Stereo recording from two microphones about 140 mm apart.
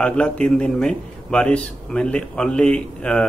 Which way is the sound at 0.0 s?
5° left (ahead or behind).